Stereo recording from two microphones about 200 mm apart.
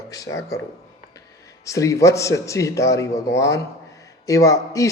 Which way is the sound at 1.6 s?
15° left (ahead or behind).